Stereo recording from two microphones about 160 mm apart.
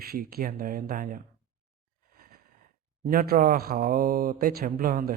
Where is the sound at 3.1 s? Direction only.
65° right (ahead or behind).